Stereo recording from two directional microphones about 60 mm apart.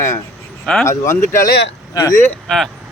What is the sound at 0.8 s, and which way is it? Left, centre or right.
Speech, left.